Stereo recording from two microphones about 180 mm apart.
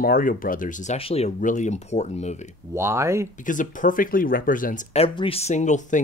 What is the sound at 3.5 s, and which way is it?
Speech, 45° left (ahead or behind).